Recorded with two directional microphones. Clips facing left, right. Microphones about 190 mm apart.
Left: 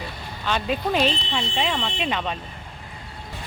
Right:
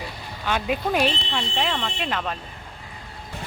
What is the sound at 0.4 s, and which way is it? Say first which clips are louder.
Speech: even; 10° right (ahead or behind).